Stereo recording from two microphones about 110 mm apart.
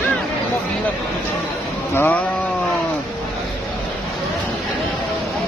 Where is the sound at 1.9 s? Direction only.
20° left (ahead or behind).